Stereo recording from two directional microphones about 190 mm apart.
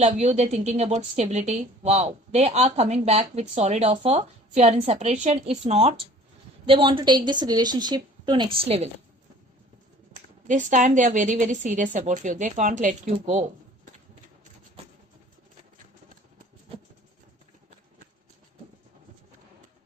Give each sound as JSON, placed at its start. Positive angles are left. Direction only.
{"t": 0.0, "sound": "a woman's voice", "side_deg": -35}
{"t": 10.4, "sound": "a woman's voice", "side_deg": -40}